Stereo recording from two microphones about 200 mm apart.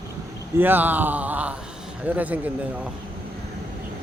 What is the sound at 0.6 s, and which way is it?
Speech, 10° right (ahead or behind).